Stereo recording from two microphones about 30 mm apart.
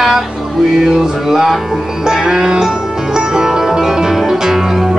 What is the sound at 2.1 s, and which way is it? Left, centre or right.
Music, centre.